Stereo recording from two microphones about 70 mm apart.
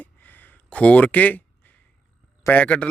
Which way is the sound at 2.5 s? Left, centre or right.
Left.